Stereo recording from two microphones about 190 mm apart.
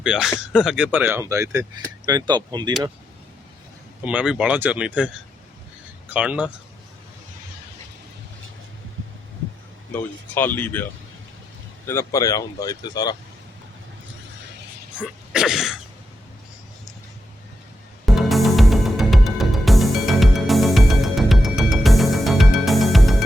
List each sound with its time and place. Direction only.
0.0 s speech: 5° right (ahead or behind); by 2.7 s 20° right (ahead or behind)
4.0 s speech: 5° right (ahead or behind)
9.9 s speech: 10° left (ahead or behind)
11.9 s speech: 15° left (ahead or behind)
14.9 s sneeze: 5° right (ahead or behind)
18.0 s music: centre (ahead or behind)